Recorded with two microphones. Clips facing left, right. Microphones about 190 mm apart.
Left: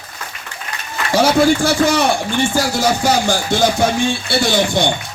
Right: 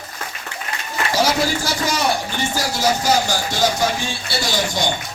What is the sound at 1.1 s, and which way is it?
Speech, 60° left (ahead or behind).